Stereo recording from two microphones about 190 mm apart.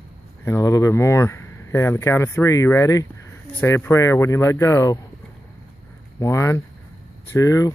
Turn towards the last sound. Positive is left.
turn(degrees=15)  # may be behind; listen again after turning